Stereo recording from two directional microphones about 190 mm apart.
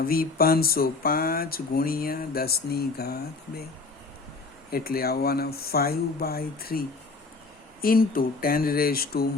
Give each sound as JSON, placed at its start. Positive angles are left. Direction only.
{"t": 0.0, "sound": "speech", "side_deg": 50}
{"t": 4.7, "sound": "speech", "side_deg": 50}